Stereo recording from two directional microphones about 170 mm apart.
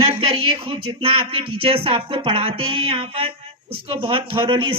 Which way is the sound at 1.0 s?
35° right (ahead or behind).